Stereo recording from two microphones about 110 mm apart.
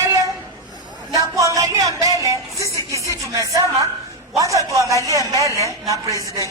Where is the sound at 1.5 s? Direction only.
30° right (ahead or behind).